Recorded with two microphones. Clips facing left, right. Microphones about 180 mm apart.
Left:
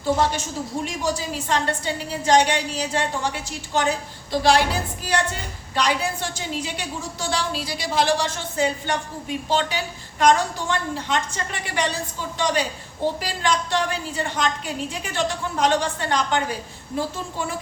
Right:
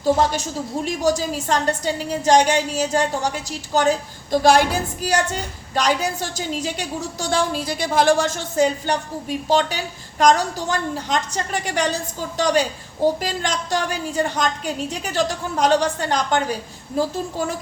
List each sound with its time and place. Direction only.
0.0 s a woman's voice: 40° right (ahead or behind)